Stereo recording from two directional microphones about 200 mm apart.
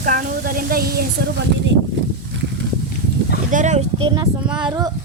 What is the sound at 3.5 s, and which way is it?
Speech, 35° right (ahead or behind).